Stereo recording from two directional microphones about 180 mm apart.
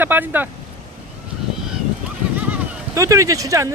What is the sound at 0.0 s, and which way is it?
Speech, 10° right (ahead or behind).